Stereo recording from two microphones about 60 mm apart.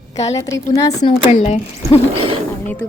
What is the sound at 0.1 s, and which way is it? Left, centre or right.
Speech, left.